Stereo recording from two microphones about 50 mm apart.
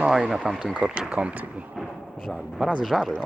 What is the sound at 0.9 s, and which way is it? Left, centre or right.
Speech, right.